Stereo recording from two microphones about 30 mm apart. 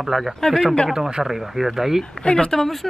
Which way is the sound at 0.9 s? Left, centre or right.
Right.